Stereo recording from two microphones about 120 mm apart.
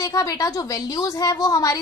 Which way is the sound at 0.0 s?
30° left (ahead or behind).